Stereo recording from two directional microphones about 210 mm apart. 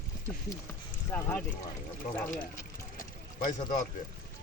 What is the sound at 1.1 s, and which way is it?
Speech, 10° left (ahead or behind).